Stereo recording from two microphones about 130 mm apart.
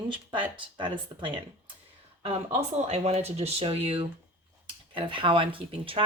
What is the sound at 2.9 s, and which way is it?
Speech, 55° right (ahead or behind).